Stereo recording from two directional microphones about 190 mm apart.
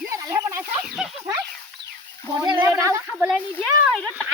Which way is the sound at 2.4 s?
25° right (ahead or behind).